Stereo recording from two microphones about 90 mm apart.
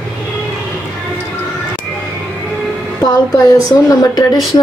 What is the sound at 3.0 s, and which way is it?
A woman's voice, 40° left (ahead or behind).